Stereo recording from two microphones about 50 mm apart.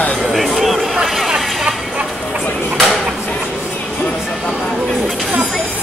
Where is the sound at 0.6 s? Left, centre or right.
Centre.